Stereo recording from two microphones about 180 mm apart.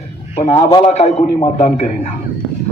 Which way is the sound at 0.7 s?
35° left (ahead or behind).